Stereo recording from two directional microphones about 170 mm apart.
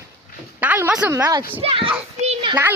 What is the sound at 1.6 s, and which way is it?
Speech, 30° right (ahead or behind).